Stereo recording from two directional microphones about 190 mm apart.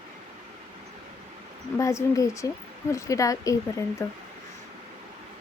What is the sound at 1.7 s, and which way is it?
Speech, 15° left (ahead or behind).